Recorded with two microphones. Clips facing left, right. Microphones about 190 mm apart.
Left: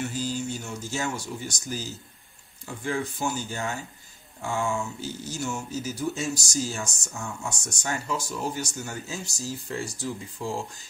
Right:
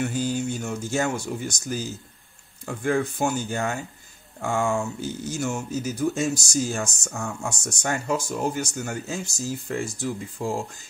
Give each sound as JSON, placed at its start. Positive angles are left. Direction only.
{"t": 0.0, "sound": "speech", "side_deg": -55}